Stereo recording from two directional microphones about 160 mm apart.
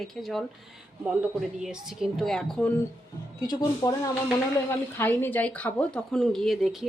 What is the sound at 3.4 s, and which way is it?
Speech, 25° left (ahead or behind).